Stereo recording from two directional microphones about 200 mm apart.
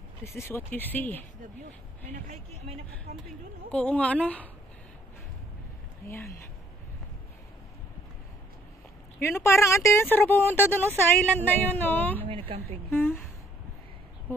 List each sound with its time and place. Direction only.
0.2 s speech: 10° left (ahead or behind)
2.2 s speech: 35° right (ahead or behind)
3.7 s speech: 5° left (ahead or behind)
6.0 s speech: 10° left (ahead or behind)
9.2 s speech: 10° left (ahead or behind)
12.3 s a woman's voice: 25° right (ahead or behind)
12.9 s speech: 10° left (ahead or behind)